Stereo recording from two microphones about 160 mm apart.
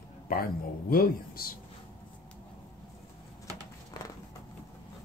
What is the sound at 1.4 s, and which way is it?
Speech, 65° left (ahead or behind).